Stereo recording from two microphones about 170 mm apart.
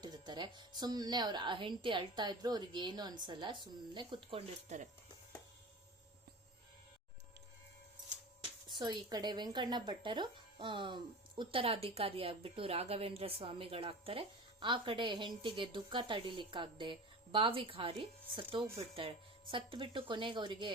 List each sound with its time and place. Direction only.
0.0 s speech: 25° right (ahead or behind)
8.7 s speech: 25° right (ahead or behind)